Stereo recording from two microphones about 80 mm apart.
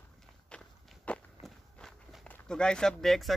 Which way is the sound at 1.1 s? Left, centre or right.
Centre.